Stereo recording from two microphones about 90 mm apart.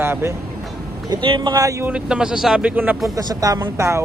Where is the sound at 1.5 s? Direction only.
40° right (ahead or behind).